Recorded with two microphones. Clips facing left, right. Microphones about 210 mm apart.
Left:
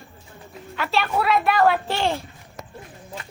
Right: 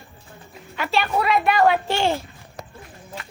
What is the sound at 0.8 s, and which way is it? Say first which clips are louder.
A woman's voice: right 1 dB; centre (ahead or behind).